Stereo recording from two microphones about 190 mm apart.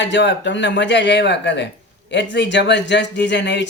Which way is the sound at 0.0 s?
70° left (ahead or behind).